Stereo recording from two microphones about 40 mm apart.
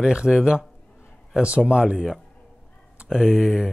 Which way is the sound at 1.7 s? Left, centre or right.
Right.